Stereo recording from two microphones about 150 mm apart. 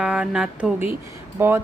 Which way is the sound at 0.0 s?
5° right (ahead or behind).